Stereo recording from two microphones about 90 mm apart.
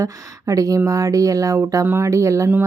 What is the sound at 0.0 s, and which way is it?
Speech, 35° right (ahead or behind).